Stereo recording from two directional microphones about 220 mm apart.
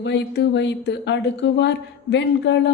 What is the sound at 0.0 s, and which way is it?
Speech, 55° left (ahead or behind).